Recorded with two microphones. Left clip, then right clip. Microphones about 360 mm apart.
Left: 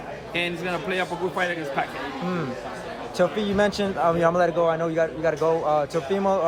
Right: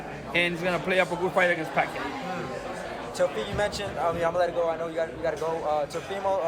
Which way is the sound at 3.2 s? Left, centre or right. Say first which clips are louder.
Left 5 dB; centre.